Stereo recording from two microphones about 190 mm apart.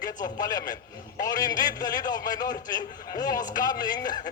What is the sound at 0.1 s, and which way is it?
A man's voice, 20° left (ahead or behind).